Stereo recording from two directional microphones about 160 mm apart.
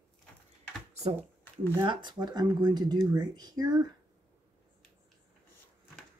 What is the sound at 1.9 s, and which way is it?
Speech, 30° right (ahead or behind).